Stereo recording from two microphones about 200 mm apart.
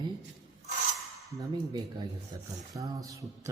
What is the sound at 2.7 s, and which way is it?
Mantra, 15° right (ahead or behind).